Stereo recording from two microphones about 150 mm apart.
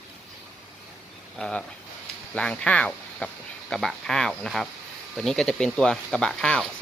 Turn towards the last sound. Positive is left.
turn(degrees=5)  # may be behind; listen again after turning